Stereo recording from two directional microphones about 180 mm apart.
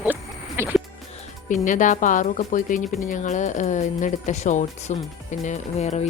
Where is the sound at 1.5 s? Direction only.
45° left (ahead or behind).